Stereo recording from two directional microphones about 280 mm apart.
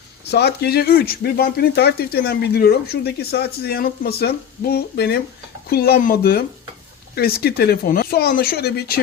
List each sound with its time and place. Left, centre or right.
0.3 s speech: left